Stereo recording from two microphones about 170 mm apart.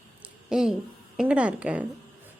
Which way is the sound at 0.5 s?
5° right (ahead or behind).